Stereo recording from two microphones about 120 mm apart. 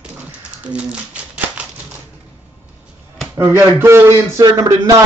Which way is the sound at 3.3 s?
20° right (ahead or behind).